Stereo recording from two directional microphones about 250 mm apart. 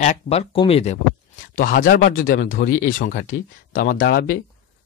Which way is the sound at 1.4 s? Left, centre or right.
Left.